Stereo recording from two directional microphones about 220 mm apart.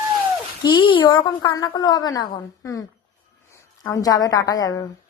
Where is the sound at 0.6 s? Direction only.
20° left (ahead or behind).